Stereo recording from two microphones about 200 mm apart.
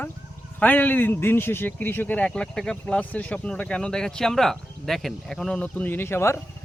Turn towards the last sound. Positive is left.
turn(degrees=10)  # may be behind; listen again after turning